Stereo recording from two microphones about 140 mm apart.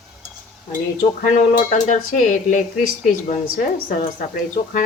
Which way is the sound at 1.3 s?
70° left (ahead or behind).